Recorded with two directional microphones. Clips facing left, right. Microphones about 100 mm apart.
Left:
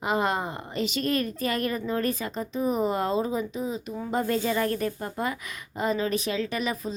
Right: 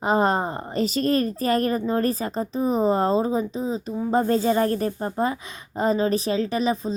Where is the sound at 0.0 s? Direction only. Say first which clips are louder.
Right 5 dB; 35° right (ahead or behind).